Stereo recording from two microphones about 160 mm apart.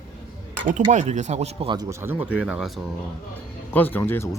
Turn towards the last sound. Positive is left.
turn(degrees=15)  # may be behind; listen again after turning